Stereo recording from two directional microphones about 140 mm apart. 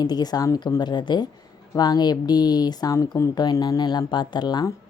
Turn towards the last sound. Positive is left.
turn(degrees=30)  # may be behind; listen again after turning